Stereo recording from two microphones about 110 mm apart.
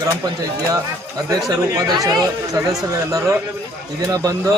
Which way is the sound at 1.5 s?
30° right (ahead or behind).